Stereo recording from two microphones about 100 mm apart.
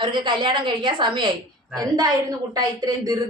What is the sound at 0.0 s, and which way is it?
A woman's voice, 50° right (ahead or behind).